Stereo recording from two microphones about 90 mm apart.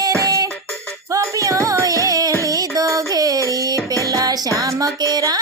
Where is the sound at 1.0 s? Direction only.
35° right (ahead or behind).